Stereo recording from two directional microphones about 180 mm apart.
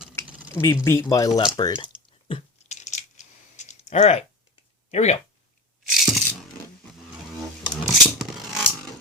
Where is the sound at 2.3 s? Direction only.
40° left (ahead or behind).